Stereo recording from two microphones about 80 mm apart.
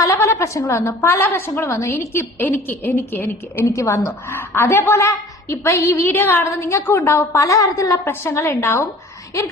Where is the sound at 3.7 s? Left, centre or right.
Left.